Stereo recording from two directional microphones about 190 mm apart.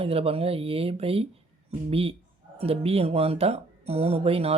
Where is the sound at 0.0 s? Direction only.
30° right (ahead or behind).